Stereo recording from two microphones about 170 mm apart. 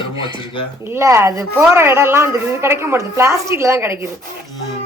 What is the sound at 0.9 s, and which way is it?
A woman's voice, 15° right (ahead or behind).